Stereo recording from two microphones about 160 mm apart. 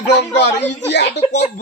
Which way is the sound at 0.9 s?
90° left.